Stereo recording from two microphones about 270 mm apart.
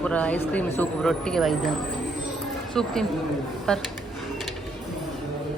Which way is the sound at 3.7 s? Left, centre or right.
Centre.